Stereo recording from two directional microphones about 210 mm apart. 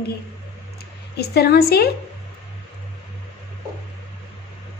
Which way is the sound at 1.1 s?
50° left (ahead or behind).